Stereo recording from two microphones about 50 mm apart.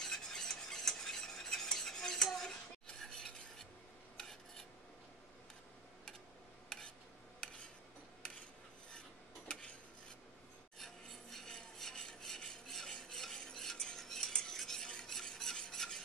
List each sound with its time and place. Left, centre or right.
0.0 s stir: centre
2.2 s a sound: centre
3.0 s stir: centre
7.4 s cutlery: centre
9.5 s dishes: left
10.8 s a sound: centre
13.1 s stir: centre
13.9 s cutlery: centre
14.9 s stir: centre